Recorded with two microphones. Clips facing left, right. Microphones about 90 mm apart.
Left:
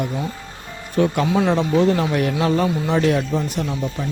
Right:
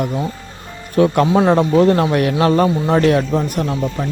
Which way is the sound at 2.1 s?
65° right (ahead or behind).